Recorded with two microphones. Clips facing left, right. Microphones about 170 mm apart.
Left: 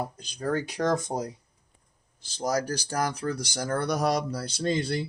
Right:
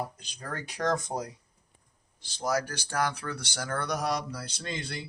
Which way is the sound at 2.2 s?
40° left (ahead or behind).